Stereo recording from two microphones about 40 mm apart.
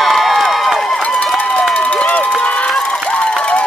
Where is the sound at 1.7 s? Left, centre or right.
Left.